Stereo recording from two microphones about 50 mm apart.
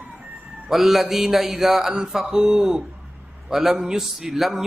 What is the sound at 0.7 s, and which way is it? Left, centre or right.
A man's voice, centre.